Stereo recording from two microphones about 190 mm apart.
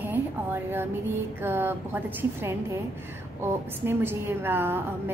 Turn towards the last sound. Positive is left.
turn(degrees=-10)  # may be behind; listen again after turning